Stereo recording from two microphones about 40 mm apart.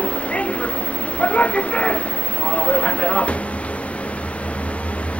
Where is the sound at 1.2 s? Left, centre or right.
Left.